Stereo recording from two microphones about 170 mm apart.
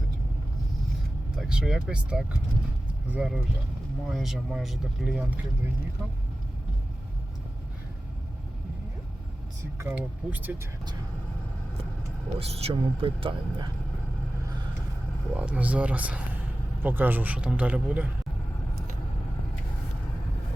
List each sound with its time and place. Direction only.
1.4 s speech: 5° right (ahead or behind)
9.7 s a man's voice: 15° right (ahead or behind)
12.4 s speech: 35° right (ahead or behind)
15.4 s a man's voice: 10° right (ahead or behind)